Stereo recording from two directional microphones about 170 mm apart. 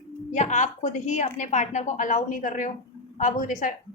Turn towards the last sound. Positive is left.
turn(degrees=50)  # may be behind; listen again after turning